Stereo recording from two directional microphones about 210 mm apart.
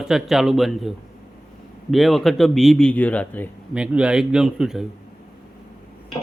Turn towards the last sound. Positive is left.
turn(degrees=0)  # may be behind; listen again after turning